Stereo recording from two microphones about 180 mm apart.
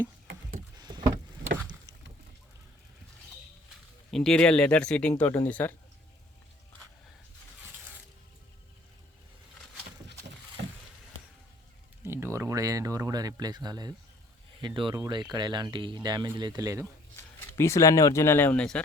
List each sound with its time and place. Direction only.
0.8 s vehicle: 25° right (ahead or behind)
4.1 s speech: 5° left (ahead or behind)
10.6 s a sound: 80° right
12.0 s a sound: 15° right (ahead or behind)
14.6 s speech: 25° right (ahead or behind)
16.8 s speech: 15° left (ahead or behind)